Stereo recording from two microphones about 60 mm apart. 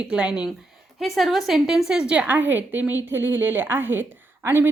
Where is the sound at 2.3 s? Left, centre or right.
Right.